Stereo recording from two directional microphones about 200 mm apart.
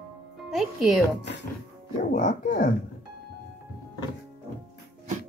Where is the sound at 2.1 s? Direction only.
45° left (ahead or behind).